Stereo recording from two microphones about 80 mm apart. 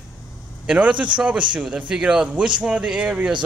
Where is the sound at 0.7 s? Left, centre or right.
Centre.